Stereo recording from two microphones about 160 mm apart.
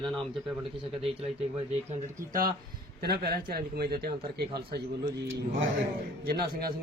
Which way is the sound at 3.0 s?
75° right (ahead or behind).